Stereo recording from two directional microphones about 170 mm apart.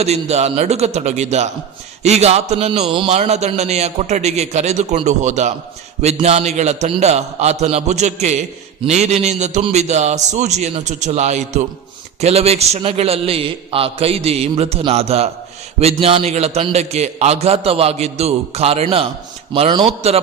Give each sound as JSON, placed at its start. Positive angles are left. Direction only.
{"t": 0.0, "sound": "a man's voice", "side_deg": -40}